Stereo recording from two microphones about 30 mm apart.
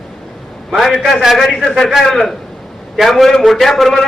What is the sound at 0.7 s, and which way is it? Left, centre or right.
Speech, centre.